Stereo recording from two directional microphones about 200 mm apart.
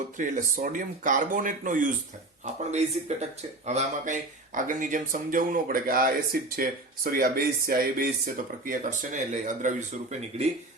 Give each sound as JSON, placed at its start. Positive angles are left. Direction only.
{"t": 0.2, "sound": "speech", "side_deg": -40}